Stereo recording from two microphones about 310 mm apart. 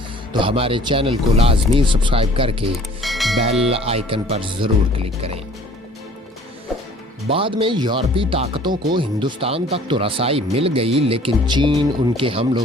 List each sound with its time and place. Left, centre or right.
0.3 s speech: centre
3.0 s mechanisms: centre
3.7 s speech: centre
7.3 s speech: centre